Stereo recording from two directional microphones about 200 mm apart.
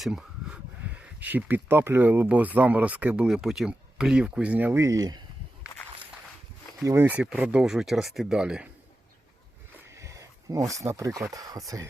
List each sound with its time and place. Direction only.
0.0 s speech: 5° right (ahead or behind); by 5.2 s 20° right (ahead or behind)
6.8 s speech: 10° right (ahead or behind)
9.9 s a sound: 15° right (ahead or behind)
11.3 s speech: 15° right (ahead or behind)